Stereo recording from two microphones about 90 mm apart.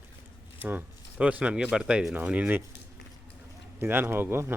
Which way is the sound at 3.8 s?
25° right (ahead or behind).